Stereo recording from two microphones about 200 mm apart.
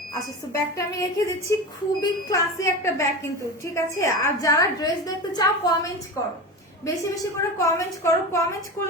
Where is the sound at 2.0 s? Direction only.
15° left (ahead or behind).